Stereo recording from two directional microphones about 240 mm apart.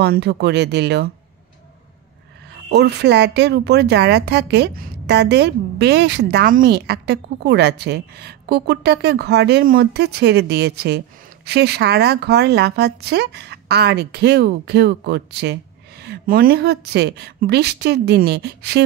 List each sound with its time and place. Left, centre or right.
0.0 s speech: right
2.7 s speech: right